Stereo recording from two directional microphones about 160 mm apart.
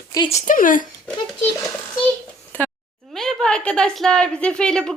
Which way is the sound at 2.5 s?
10° left (ahead or behind).